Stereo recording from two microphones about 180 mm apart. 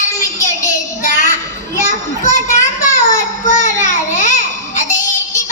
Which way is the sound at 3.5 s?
45° left (ahead or behind).